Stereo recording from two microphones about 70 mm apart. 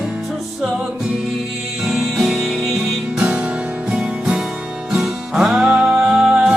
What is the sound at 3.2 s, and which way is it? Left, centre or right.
Music, centre.